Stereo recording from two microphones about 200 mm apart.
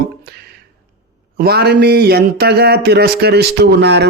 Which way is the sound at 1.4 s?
50° right (ahead or behind).